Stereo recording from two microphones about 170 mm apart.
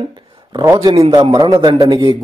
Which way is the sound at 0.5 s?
25° right (ahead or behind).